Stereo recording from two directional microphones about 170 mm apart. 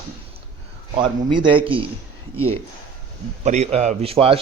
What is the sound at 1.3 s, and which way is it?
Speech, 30° right (ahead or behind).